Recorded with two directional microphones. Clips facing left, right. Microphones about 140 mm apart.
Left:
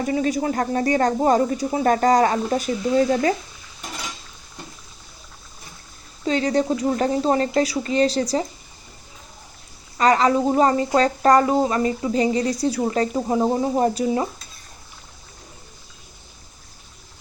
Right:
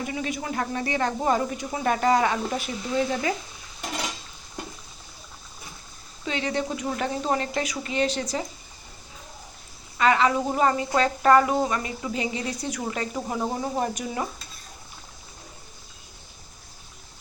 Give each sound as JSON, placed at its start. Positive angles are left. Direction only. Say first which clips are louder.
{"t": 0.0, "sound": "speech", "louder": "left 9 dB", "side_deg": 40}
{"t": 6.2, "sound": "speech", "louder": "left 8 dB", "side_deg": 40}
{"t": 10.0, "sound": "speech", "louder": "left 4 dB", "side_deg": 40}